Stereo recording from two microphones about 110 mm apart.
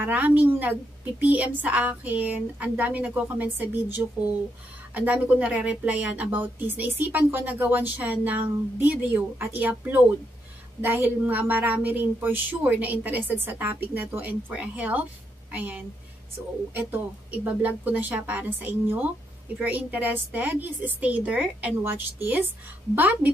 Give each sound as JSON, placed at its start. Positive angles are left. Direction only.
{"t": 0.0, "sound": "a woman's voice", "side_deg": -15}